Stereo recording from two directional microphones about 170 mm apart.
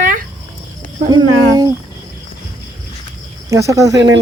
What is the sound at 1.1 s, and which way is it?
Speech, 25° right (ahead or behind).